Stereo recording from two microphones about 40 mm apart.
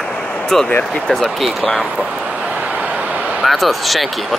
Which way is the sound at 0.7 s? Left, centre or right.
Left.